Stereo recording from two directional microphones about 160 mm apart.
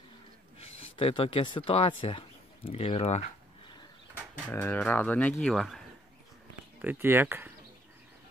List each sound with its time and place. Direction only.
0.6 s speech: 35° left (ahead or behind)
4.5 s speech: 10° left (ahead or behind)
6.8 s speech: 10° right (ahead or behind)